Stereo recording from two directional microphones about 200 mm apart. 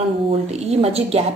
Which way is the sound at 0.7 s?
30° right (ahead or behind).